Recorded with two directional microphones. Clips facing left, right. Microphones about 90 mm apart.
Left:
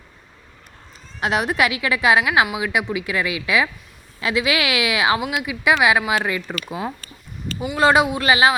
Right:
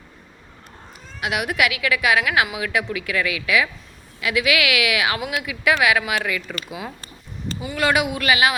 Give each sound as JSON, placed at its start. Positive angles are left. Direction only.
{"t": 1.2, "sound": "a woman's voice", "side_deg": 30}
{"t": 7.8, "sound": "a woman's voice", "side_deg": 30}